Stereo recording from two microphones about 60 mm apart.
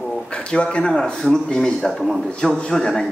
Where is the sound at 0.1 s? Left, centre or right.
Centre.